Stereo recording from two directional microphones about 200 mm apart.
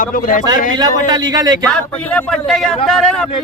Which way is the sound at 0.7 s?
20° right (ahead or behind).